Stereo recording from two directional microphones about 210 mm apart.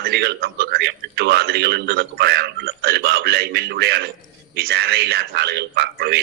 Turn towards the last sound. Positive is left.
turn(degrees=-50)  # may be behind; listen again after turning